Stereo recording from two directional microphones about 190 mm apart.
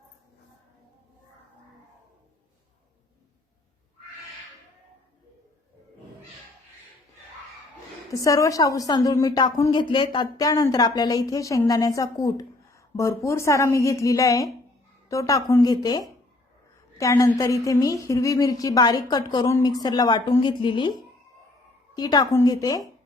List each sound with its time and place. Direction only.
8.2 s a woman's voice: 15° left (ahead or behind)
21.9 s a woman's voice: 20° left (ahead or behind)